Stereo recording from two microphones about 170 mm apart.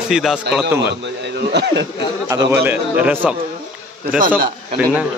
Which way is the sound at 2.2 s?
25° right (ahead or behind).